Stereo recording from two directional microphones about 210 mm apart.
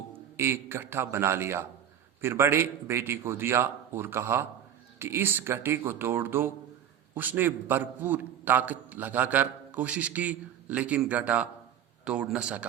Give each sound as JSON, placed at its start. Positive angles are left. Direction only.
{"t": 0.3, "sound": "a man's voice", "side_deg": -10}